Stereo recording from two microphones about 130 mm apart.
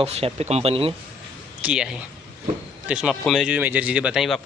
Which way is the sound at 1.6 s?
5° right (ahead or behind).